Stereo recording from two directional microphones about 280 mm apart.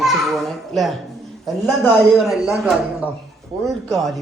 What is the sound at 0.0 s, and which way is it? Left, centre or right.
A child's voice, centre.